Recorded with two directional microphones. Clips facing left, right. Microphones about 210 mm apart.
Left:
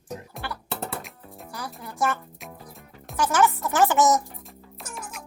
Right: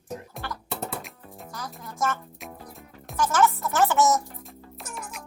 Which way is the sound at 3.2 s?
15° left (ahead or behind).